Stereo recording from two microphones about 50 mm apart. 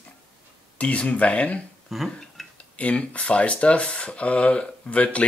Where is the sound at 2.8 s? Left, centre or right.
Left.